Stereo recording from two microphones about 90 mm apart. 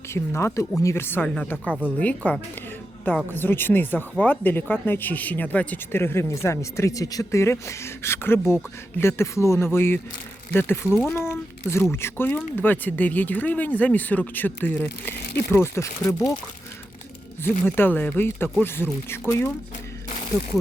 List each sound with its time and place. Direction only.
0.1 s speech: 30° left (ahead or behind)
1.2 s speech: 15° left (ahead or behind); by 16.3 s 35° left (ahead or behind)
17.4 s speech: 25° left (ahead or behind)